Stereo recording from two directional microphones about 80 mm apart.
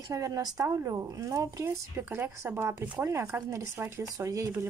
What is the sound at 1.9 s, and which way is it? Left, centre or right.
Speech, right.